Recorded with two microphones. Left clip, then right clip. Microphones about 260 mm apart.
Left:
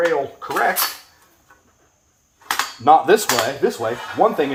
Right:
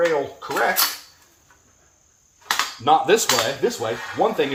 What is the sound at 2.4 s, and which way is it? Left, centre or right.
Speech, centre.